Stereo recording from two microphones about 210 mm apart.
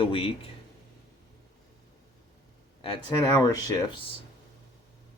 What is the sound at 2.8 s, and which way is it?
Speech, 25° left (ahead or behind).